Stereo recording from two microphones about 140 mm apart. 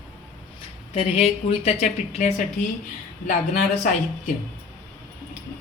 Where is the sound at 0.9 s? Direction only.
45° left (ahead or behind).